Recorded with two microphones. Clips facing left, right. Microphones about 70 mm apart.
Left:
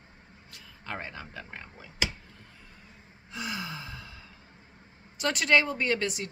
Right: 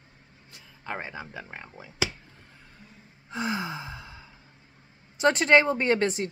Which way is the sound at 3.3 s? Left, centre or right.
Right.